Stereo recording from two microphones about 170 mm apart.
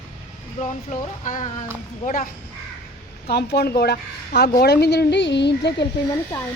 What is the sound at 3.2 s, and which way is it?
A woman's voice, 70° left (ahead or behind).